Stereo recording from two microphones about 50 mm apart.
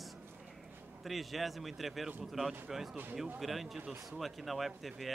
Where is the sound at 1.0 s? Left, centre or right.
Centre.